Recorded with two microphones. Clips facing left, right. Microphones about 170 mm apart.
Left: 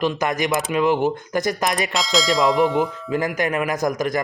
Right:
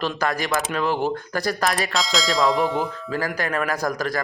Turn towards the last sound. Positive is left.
turn(degrees=20)  # may be behind; listen again after turning